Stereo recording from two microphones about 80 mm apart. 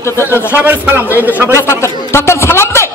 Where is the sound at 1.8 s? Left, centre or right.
Left.